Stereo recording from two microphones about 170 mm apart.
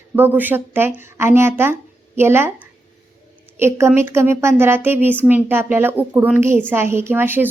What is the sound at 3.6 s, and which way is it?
A woman's voice, 15° right (ahead or behind).